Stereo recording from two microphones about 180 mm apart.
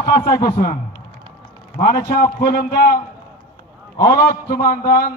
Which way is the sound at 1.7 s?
60° left (ahead or behind).